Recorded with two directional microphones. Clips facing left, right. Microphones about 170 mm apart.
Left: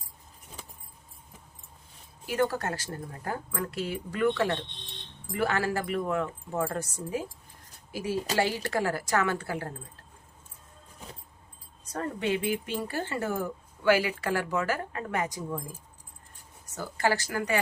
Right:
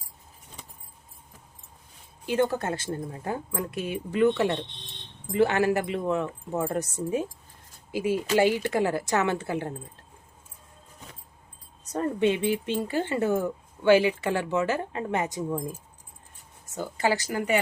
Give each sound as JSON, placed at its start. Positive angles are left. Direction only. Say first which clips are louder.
{"t": 2.2, "sound": "speech", "louder": "right 3 dB", "side_deg": -20}
{"t": 11.9, "sound": "speech", "louder": "right 5 dB", "side_deg": -20}
{"t": 16.7, "sound": "speech", "louder": "right 2 dB", "side_deg": -20}